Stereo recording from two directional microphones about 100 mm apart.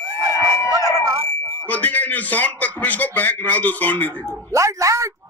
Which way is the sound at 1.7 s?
15° left (ahead or behind).